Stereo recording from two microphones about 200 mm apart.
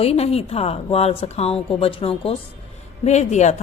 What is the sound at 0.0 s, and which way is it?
A woman's voice, 30° left (ahead or behind).